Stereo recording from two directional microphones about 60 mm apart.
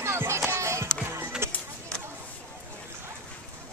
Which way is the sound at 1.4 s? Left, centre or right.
Right.